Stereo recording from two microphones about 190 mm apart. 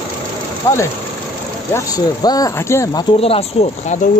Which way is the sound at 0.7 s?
15° left (ahead or behind).